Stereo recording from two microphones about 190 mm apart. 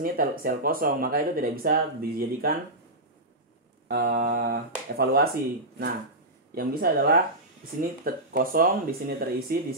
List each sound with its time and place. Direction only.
0.0 s speech: 50° right (ahead or behind)
3.9 s speech: 55° right (ahead or behind)